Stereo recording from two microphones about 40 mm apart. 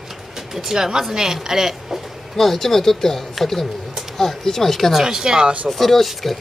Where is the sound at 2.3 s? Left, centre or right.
Centre.